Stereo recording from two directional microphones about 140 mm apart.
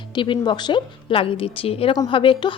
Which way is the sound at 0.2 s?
35° left (ahead or behind).